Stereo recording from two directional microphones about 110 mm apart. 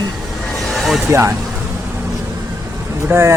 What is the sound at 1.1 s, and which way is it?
Speech, 25° right (ahead or behind).